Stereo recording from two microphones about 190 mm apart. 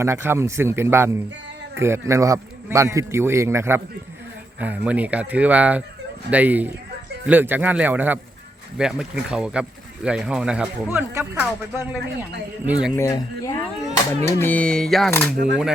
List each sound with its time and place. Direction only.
0.0 s a man's voice: 15° right (ahead or behind)
13.0 s speech: 15° left (ahead or behind); by 15.1 s centre (ahead or behind)